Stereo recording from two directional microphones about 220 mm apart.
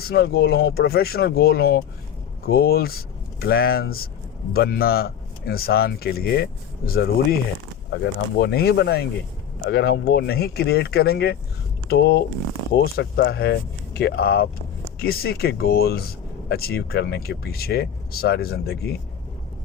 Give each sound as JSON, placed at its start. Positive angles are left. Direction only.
{"t": 0.0, "sound": "speech", "side_deg": 45}